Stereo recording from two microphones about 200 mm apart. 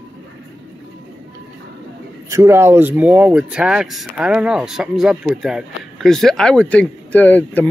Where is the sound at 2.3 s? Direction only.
15° right (ahead or behind).